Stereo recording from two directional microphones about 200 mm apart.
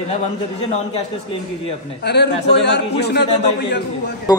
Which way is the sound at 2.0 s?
60° left (ahead or behind).